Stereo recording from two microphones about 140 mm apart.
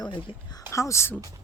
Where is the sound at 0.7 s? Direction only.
20° left (ahead or behind).